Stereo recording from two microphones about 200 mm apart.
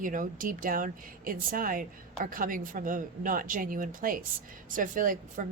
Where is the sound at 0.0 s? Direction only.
40° right (ahead or behind).